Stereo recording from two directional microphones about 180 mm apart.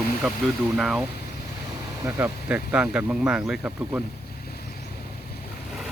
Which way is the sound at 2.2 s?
5° right (ahead or behind).